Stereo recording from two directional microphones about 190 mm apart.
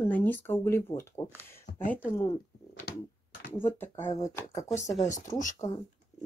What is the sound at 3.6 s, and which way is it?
Speech, 10° left (ahead or behind).